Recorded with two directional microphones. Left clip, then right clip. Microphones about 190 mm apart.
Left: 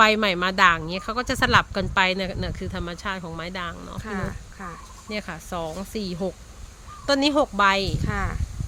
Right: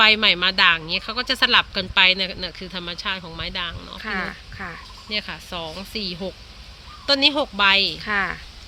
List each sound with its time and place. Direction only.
0.0 s speech: 60° left (ahead or behind)
4.0 s speech: centre (ahead or behind)
5.0 s speech: 60° left (ahead or behind)
8.0 s speech: 5° left (ahead or behind)